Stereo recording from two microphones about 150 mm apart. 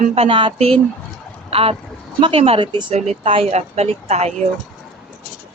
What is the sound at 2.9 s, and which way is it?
Speech, 45° right (ahead or behind).